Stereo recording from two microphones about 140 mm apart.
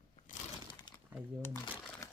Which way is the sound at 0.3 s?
65° left (ahead or behind).